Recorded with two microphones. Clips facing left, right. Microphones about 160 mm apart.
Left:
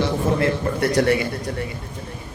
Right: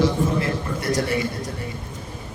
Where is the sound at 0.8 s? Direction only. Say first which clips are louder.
Left 3 dB; 65° left (ahead or behind).